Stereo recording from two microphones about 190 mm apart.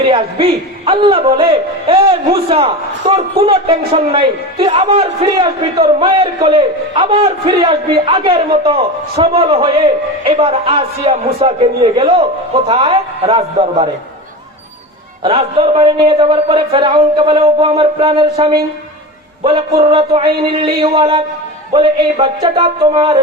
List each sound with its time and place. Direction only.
0.9 s a man's voice: 30° right (ahead or behind)
15.2 s a man's voice: 30° right (ahead or behind)